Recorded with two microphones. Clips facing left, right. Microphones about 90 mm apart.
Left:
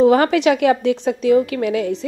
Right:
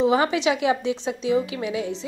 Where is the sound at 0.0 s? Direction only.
60° left (ahead or behind).